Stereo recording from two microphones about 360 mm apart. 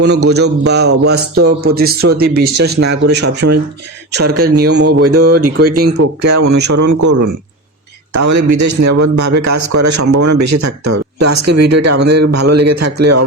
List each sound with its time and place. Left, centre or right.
0.0 s a man's voice: right
6.0 s a man's voice: right